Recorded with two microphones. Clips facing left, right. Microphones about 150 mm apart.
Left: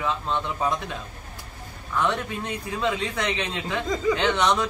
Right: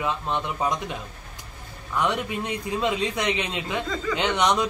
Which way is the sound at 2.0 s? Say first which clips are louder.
Even; 15° right (ahead or behind).